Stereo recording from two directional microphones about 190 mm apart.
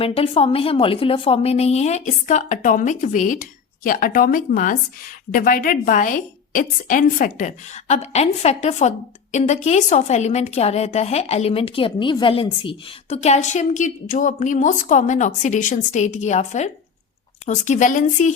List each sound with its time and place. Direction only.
0.0 s a woman's voice: 30° left (ahead or behind)